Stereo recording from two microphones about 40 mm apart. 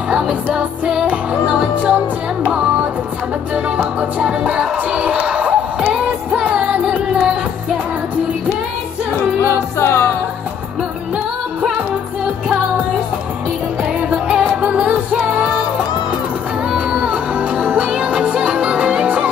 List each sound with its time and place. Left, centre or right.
1.3 s music: right
9.8 s music: left
14.3 s music: right
14.6 s music: right
14.9 s music: right
16.7 s music: right